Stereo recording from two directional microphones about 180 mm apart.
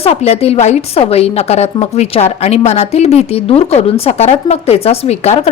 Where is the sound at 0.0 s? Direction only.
35° left (ahead or behind).